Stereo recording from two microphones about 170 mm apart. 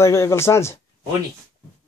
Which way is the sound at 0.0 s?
15° left (ahead or behind).